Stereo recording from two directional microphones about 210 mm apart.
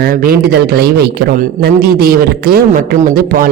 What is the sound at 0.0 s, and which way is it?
A man's voice, 45° right (ahead or behind).